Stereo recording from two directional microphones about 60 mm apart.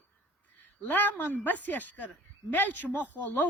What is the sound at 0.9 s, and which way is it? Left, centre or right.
A man's voice, left.